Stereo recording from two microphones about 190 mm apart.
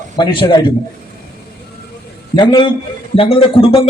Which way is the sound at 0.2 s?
25° left (ahead or behind).